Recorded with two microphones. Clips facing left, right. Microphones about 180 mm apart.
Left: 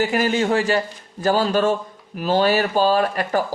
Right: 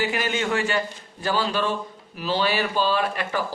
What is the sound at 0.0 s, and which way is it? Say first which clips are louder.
A man's voice: left 6 dB; 40° left (ahead or behind).